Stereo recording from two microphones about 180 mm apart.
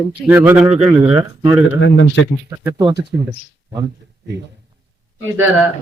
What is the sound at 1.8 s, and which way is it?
Speech, 90° left.